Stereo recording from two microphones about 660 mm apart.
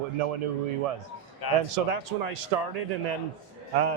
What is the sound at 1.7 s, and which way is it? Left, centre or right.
A man's voice, right.